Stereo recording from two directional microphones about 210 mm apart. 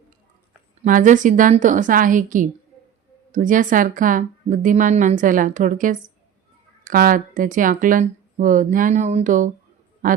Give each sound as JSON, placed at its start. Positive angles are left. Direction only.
{"t": 0.9, "sound": "a woman's voice", "side_deg": -40}